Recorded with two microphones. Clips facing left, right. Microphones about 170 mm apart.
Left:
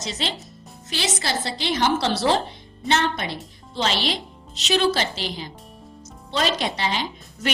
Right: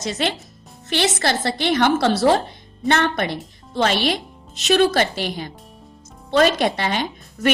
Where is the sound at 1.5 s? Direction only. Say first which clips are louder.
Right 4 dB; 55° right (ahead or behind).